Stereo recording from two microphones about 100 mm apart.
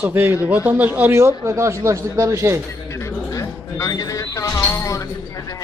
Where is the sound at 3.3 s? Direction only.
30° left (ahead or behind).